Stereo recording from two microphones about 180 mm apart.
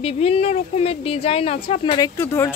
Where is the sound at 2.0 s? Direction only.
15° left (ahead or behind).